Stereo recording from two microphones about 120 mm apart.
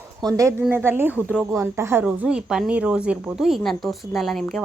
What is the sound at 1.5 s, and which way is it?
Speech, 20° right (ahead or behind).